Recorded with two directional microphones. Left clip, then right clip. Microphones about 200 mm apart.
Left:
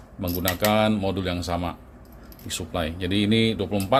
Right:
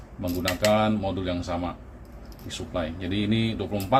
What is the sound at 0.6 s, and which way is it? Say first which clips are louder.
Speech: left 1 dB; 50° left (ahead or behind).